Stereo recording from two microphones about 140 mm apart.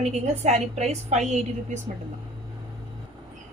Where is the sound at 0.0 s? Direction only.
55° right (ahead or behind).